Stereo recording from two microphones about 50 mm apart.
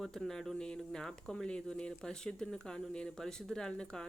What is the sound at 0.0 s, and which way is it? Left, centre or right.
Speech, centre.